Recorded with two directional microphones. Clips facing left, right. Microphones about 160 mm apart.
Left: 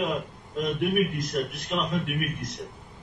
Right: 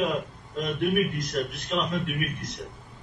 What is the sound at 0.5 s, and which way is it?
A man's voice, 5° left (ahead or behind).